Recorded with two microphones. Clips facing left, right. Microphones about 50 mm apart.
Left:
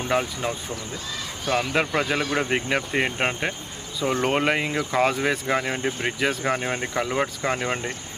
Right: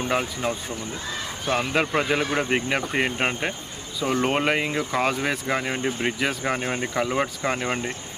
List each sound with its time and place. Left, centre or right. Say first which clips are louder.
0.1 s speech: left 2 dB; centre
1.5 s speech: left 1 dB; right
1.9 s speech: right 1 dB; centre